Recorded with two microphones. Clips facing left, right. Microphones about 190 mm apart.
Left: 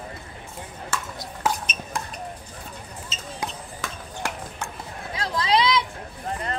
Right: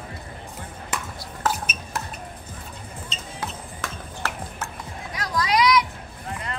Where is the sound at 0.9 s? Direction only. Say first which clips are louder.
Even; 15° right (ahead or behind).